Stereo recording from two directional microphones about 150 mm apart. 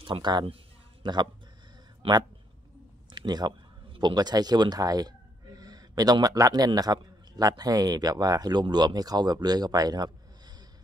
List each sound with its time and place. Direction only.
0.0 s speech: 35° right (ahead or behind)